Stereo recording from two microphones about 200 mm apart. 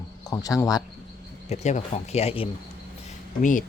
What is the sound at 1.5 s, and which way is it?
Speech, 35° left (ahead or behind).